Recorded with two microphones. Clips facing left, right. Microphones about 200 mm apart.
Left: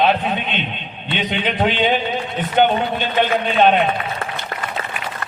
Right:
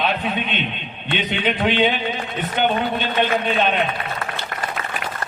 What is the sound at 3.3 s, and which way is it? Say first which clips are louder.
Speech: left 4 dB; 45° left (ahead or behind).